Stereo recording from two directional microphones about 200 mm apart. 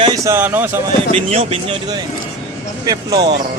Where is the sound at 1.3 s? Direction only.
30° right (ahead or behind).